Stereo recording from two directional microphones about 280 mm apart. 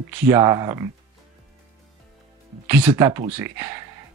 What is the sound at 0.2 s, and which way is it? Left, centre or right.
Speech, centre.